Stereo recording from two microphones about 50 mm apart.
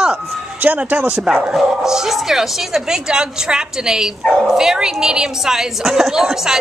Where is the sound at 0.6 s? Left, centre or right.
Right.